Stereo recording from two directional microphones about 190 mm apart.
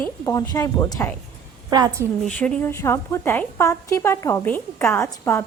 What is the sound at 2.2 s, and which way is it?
A woman's voice, 5° left (ahead or behind).